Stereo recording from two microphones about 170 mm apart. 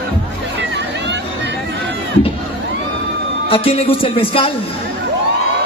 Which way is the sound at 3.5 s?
35° left (ahead or behind).